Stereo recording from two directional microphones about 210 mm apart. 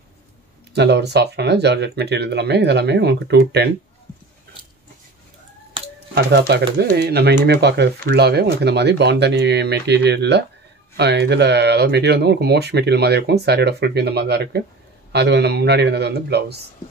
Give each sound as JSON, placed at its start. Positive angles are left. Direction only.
{"t": 0.7, "sound": "speech", "side_deg": -50}
{"t": 6.1, "sound": "speech", "side_deg": -50}